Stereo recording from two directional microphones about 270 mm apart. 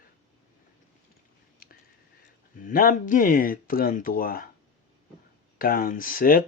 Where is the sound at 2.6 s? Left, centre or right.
Left.